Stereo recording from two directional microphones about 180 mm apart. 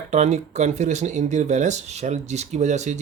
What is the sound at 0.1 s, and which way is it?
Speech, 40° right (ahead or behind).